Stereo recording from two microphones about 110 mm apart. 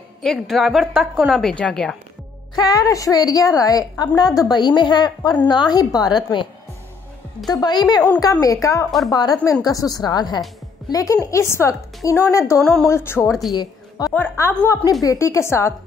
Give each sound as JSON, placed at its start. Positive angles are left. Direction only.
{"t": 0.2, "sound": "a woman's voice", "side_deg": 0}
{"t": 1.5, "sound": "a woman's voice", "side_deg": 10}
{"t": 2.5, "sound": "a woman's voice", "side_deg": 35}
{"t": 13.5, "sound": "a woman's voice", "side_deg": 35}
{"t": 14.1, "sound": "a woman's voice", "side_deg": 20}
{"t": 14.9, "sound": "a woman's voice", "side_deg": 30}